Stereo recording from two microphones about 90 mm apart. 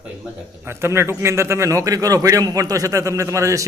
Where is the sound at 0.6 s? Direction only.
30° right (ahead or behind).